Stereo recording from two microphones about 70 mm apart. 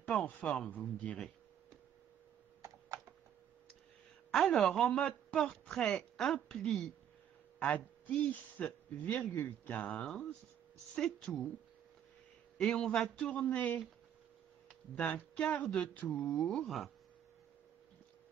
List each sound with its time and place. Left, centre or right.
0.0 s speech: centre
4.3 s a woman's voice: centre
7.5 s a man's voice: left
11.1 s a woman's voice: centre
12.5 s a woman's voice: centre
15.0 s speech: left
16.6 s speech: centre